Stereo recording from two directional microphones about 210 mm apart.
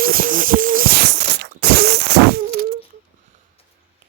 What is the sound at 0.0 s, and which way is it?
Music, 45° right (ahead or behind).